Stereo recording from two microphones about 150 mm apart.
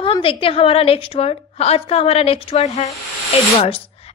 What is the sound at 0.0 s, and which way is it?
A woman's voice, 35° left (ahead or behind).